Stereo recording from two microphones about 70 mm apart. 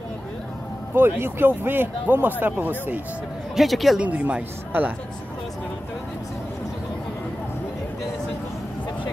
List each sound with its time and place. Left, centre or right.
0.9 s speech: right
3.5 s speech: centre
4.0 s speech: centre